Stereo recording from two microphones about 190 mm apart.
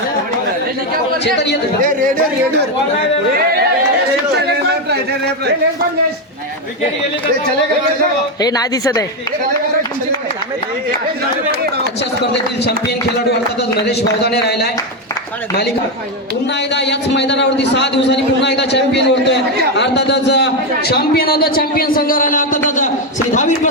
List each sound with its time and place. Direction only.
1.2 s a man's voice: 65° left (ahead or behind)
8.4 s speech: 20° left (ahead or behind)
13.7 s a man's voice: 60° left (ahead or behind)
16.7 s a man's voice: 65° left (ahead or behind); by 22.6 s 45° left (ahead or behind)